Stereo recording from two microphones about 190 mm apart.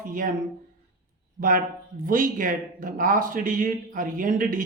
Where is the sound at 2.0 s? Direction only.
45° right (ahead or behind).